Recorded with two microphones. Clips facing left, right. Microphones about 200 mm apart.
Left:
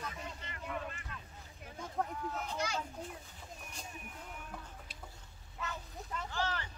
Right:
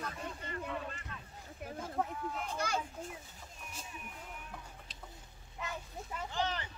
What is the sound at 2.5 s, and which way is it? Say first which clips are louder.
Children playing: right 2 dB; 55° right (ahead or behind).